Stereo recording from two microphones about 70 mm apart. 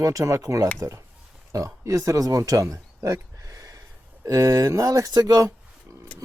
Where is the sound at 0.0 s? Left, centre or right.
Right.